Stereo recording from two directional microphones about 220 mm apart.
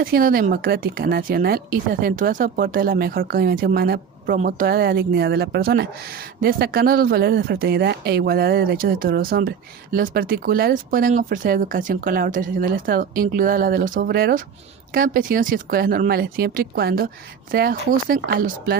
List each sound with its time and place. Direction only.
0.0 s speech: 40° right (ahead or behind)